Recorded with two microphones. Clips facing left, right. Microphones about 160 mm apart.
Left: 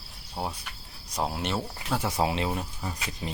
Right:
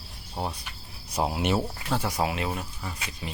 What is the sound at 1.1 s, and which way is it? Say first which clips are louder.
Speech: right 4 dB; 10° right (ahead or behind).